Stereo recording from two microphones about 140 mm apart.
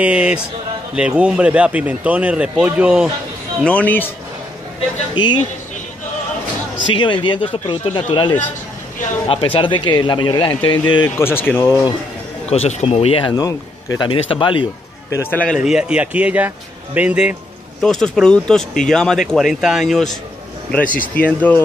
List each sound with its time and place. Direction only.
0.0 s speech: 10° right (ahead or behind)
3.6 s speech: 10° left (ahead or behind)
5.1 s speech: 30° left (ahead or behind)
6.9 s speech: 35° left (ahead or behind)
11.1 s speech: 15° left (ahead or behind)
12.4 s speech: 50° left (ahead or behind)
13.3 s speech: 25° left (ahead or behind)
15.1 s speech: 15° left (ahead or behind)
15.6 s speech: 5° right (ahead or behind)
17.8 s speech: 5° left (ahead or behind)